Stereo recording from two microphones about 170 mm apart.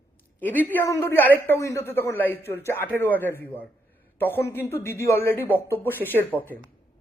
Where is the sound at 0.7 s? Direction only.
15° left (ahead or behind).